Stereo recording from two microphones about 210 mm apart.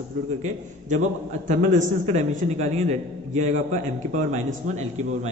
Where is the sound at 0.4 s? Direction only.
35° right (ahead or behind).